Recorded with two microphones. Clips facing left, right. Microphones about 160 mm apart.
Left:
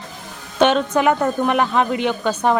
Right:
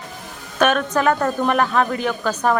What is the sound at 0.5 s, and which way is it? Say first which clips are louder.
A man's voice: left 2 dB; 25° left (ahead or behind).